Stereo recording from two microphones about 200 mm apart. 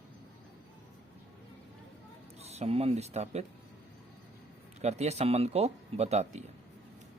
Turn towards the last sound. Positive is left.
turn(degrees=-35)  # may be behind; listen again after turning